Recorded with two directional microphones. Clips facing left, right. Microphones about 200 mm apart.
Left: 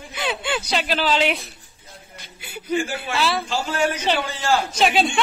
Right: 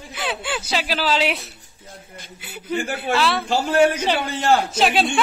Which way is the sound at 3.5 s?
60° right (ahead or behind).